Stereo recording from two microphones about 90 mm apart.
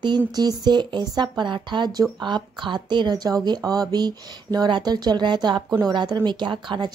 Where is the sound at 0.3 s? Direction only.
45° right (ahead or behind).